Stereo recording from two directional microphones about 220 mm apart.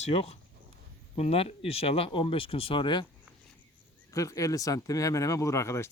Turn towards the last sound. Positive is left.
turn(degrees=15)  # may be behind; listen again after turning